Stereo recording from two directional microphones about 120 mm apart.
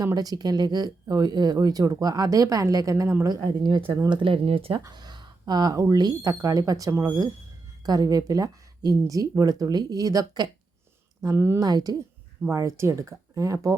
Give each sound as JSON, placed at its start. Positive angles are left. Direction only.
{"t": 0.0, "sound": "speech", "side_deg": -30}
{"t": 3.4, "sound": "speech", "side_deg": -40}
{"t": 3.8, "sound": "speech", "side_deg": -25}
{"t": 4.1, "sound": "speech", "side_deg": -45}
{"t": 4.8, "sound": "speech", "side_deg": -35}
{"t": 11.6, "sound": "speech", "side_deg": -30}